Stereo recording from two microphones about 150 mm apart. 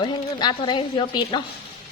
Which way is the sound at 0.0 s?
30° left (ahead or behind).